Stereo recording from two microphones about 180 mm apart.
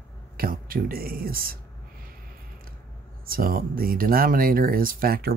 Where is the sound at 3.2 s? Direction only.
55° right (ahead or behind).